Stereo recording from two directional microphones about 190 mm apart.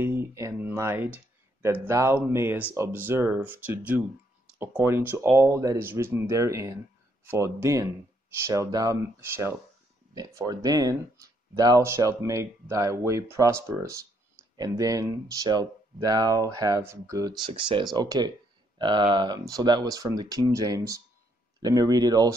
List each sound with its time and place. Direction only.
0.0 s speech: 10° right (ahead or behind)